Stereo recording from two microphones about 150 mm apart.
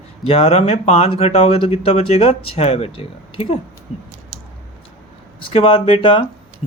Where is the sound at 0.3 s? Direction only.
40° left (ahead or behind).